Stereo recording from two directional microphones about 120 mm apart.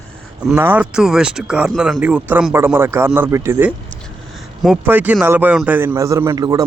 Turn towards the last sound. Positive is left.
turn(degrees=-30)  # may be behind; listen again after turning